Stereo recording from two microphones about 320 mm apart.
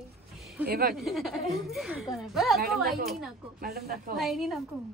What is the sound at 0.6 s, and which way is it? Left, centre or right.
Speech, right.